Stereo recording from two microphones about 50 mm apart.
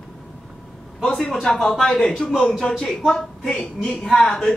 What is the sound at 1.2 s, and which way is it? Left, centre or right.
A man's voice, centre.